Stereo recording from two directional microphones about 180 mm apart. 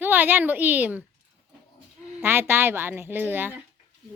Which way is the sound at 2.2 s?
10° right (ahead or behind).